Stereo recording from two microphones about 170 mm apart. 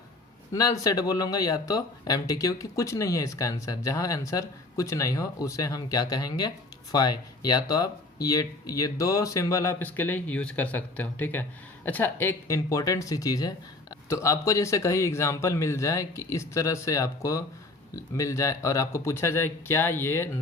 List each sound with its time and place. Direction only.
0.5 s speech: 20° left (ahead or behind)